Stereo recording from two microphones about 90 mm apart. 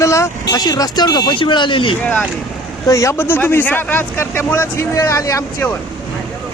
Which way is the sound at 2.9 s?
35° left (ahead or behind).